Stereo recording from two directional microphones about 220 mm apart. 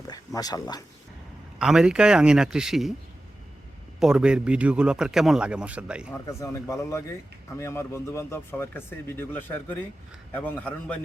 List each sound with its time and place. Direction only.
0.3 s speech: 15° left (ahead or behind)
1.5 s a man's voice: 5° right (ahead or behind)
4.0 s a man's voice: 5° right (ahead or behind)
6.2 s speech: 15° left (ahead or behind)